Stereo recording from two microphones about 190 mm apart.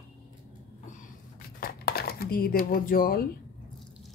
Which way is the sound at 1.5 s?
50° left (ahead or behind).